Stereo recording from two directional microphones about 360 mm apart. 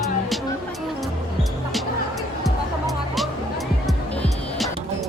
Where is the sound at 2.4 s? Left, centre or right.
Centre.